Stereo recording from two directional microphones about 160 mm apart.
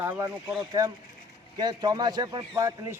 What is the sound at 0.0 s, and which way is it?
A man's voice, 15° right (ahead or behind).